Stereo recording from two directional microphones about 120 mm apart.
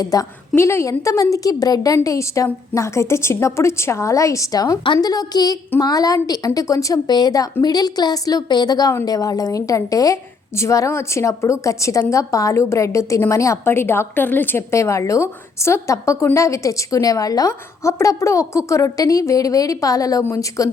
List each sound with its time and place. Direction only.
0.0 s a woman's voice: 30° left (ahead or behind)